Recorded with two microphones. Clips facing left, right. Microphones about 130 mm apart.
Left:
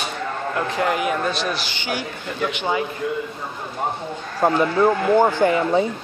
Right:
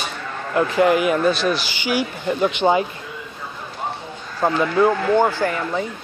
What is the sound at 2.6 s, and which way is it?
Speech, 40° right (ahead or behind).